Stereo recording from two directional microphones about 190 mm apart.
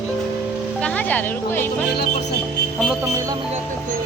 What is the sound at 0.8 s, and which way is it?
Speech, 10° left (ahead or behind).